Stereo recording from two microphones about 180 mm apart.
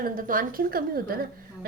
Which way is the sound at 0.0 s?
50° right (ahead or behind).